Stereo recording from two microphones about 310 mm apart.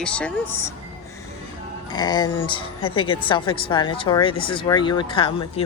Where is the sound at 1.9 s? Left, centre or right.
Centre.